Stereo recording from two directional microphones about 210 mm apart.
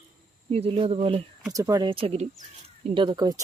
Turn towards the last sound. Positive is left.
turn(degrees=-20)  # may be behind; listen again after turning